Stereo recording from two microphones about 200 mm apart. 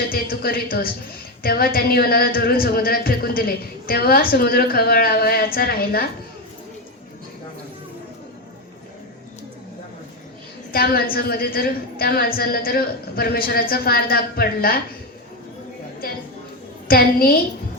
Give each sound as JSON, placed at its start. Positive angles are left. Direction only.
{"t": 0.1, "sound": "speech", "side_deg": 50}
{"t": 10.7, "sound": "speech", "side_deg": 50}
{"t": 16.9, "sound": "speech", "side_deg": 50}